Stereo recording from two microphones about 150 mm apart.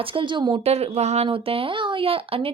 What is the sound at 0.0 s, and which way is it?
A woman's voice, 35° right (ahead or behind).